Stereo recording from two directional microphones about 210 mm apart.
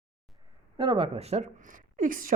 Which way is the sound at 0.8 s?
25° right (ahead or behind).